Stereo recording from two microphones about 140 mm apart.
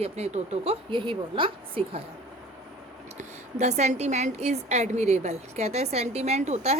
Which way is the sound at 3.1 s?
55° right (ahead or behind).